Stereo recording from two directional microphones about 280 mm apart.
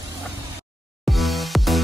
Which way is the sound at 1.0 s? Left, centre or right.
Centre.